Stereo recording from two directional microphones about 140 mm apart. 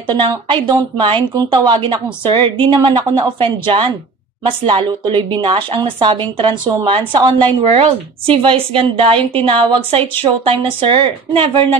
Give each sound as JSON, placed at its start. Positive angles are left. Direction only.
{"t": 0.1, "sound": "a woman's voice", "side_deg": -35}